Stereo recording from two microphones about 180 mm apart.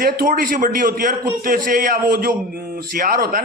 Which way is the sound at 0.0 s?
55° right (ahead or behind).